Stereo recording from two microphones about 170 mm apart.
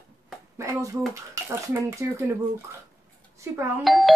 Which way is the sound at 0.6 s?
20° right (ahead or behind).